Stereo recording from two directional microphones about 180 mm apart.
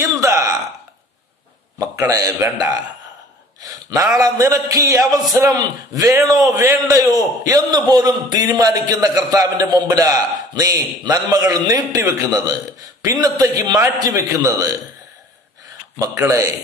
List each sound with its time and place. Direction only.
0.2 s burping: 15° right (ahead or behind)
1.8 s a man's voice: 20° right (ahead or behind)
16.0 s a man's voice: 15° right (ahead or behind)